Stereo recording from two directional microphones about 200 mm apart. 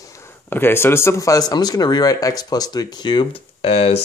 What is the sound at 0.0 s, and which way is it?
Speech, 15° left (ahead or behind).